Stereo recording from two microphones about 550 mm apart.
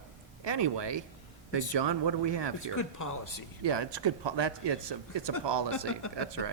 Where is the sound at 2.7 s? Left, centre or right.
Left.